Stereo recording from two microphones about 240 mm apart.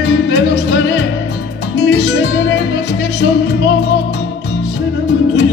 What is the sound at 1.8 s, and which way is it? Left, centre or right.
Music, left.